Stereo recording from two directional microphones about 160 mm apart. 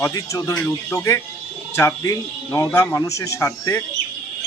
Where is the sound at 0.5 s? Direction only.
10° left (ahead or behind).